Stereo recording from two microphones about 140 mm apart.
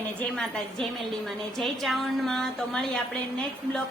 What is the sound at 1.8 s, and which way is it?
Speech, 5° left (ahead or behind).